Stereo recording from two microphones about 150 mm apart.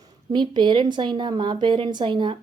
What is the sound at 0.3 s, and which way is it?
A woman's voice, 30° right (ahead or behind).